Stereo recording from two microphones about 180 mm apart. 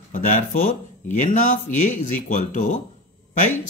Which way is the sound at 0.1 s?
45° left (ahead or behind).